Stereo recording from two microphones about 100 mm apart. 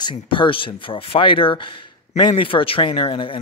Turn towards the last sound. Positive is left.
turn(degrees=55)  # may be behind; listen again after turning